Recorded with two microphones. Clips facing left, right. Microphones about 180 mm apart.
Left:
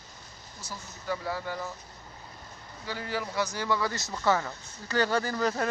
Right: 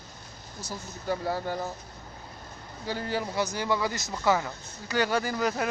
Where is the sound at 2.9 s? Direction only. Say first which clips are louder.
Right 3 dB; 30° right (ahead or behind); by 5.7 s 10° right (ahead or behind).